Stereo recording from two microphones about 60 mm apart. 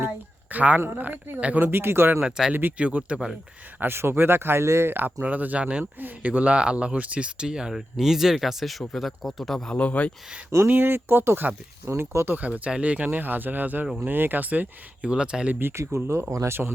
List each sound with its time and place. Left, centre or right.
0.5 s speech: right
2.2 s speech: centre
2.5 s speech: right
2.7 s speech: centre
3.8 s speech: right
5.2 s speech: right
5.8 s a man's voice: right; by 9.7 s centre
9.7 s speech: left
10.7 s speech: right
11.9 s speech: right
12.4 s speech: right
15.1 s speech: centre
15.6 s speech: right
16.5 s speech: right